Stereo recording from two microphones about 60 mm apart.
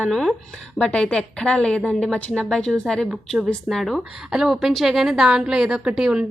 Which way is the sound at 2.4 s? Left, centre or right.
Centre.